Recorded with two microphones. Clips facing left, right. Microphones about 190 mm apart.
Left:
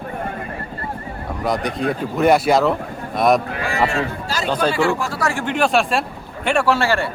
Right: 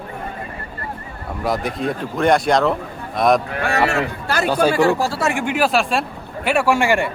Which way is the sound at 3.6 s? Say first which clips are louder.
Right 1 dB; 70° right (ahead or behind).